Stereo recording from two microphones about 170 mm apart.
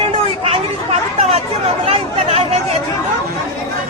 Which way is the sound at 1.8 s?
35° right (ahead or behind).